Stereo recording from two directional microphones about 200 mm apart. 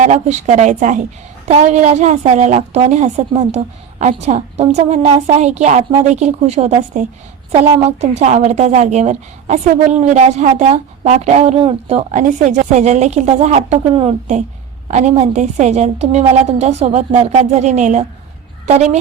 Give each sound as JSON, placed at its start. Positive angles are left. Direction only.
{"t": 0.0, "sound": "a woman's voice", "side_deg": -35}